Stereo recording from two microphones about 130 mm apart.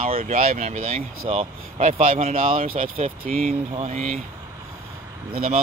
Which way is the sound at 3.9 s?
65° right (ahead or behind).